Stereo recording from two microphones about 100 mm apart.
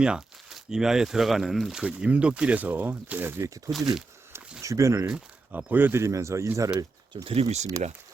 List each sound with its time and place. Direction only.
0.0 s speech: 5° right (ahead or behind)
3.7 s speech: 35° right (ahead or behind)
5.0 s speech: 15° right (ahead or behind); by 6.7 s 30° right (ahead or behind)
7.3 s speech: 85° right